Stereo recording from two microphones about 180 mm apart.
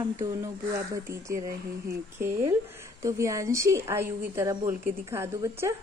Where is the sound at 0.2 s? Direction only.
15° right (ahead or behind).